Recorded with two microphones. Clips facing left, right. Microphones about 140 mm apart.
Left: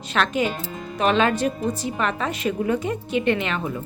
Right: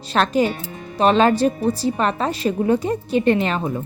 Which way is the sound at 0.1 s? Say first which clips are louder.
Right 4 dB; 35° right (ahead or behind).